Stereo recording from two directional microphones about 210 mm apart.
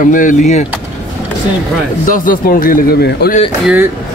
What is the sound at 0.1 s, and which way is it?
Speech, 40° left (ahead or behind).